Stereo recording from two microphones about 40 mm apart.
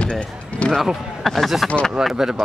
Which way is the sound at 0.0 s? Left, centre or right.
Left.